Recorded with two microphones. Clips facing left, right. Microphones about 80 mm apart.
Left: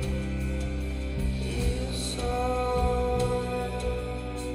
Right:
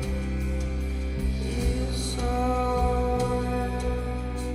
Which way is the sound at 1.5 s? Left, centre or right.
Centre.